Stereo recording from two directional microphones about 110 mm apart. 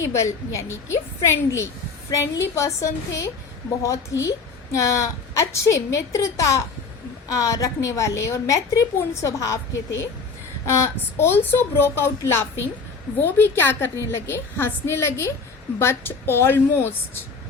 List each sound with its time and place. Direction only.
0.1 s a woman's voice: 25° left (ahead or behind)
10.7 s a woman's voice: 25° left (ahead or behind)